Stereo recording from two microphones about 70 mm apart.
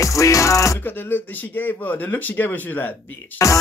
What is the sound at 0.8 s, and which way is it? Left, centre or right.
Speech, left.